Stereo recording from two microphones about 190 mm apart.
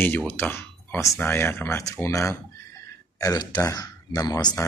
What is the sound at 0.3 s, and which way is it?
Speech, 10° left (ahead or behind).